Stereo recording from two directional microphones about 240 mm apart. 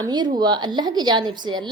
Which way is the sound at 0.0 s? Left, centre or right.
Centre.